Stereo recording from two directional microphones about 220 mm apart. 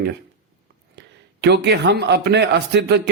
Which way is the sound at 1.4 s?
50° right (ahead or behind).